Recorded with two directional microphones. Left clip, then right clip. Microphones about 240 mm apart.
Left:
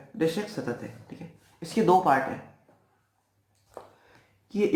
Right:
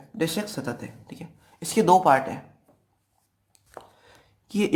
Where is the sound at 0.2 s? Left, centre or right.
Right.